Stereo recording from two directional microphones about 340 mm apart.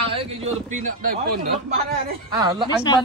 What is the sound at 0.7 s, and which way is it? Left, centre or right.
Speech, right.